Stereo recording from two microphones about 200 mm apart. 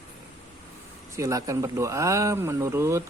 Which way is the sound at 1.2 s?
15° right (ahead or behind).